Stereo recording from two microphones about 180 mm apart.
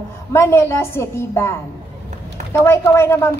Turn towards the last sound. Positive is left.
turn(degrees=15)  # may be behind; listen again after turning